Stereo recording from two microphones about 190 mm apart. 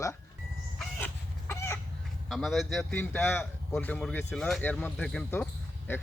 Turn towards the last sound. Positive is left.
turn(degrees=10)  # may be behind; listen again after turning